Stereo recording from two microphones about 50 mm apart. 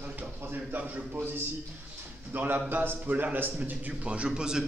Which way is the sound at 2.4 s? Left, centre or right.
Right.